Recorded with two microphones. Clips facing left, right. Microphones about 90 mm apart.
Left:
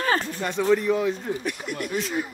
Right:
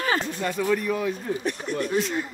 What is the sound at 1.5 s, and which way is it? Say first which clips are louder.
Speech: right 3 dB; 35° right (ahead or behind).